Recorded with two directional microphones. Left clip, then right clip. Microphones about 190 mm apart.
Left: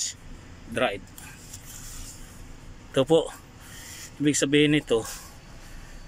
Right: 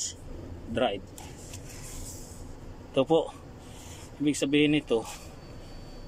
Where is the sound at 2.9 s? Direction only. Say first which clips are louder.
Left 3 dB; 5° right (ahead or behind).